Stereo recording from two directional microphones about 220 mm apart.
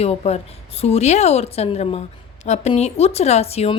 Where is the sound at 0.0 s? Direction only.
30° left (ahead or behind).